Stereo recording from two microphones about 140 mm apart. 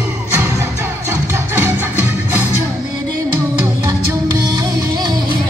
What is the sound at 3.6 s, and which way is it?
Music, 25° right (ahead or behind).